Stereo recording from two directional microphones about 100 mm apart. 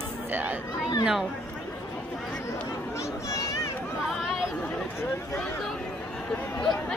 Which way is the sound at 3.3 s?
35° left (ahead or behind).